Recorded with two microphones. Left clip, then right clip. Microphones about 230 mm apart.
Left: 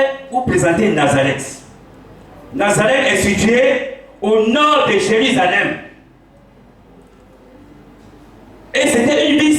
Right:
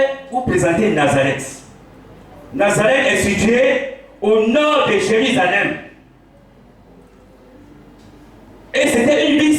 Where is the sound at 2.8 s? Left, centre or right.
Centre.